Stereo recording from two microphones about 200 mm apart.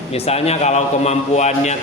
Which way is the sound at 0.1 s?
30° left (ahead or behind).